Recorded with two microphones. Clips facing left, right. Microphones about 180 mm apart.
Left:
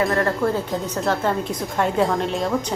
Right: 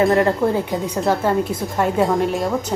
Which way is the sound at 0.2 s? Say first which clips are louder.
Right 4 dB; 20° right (ahead or behind).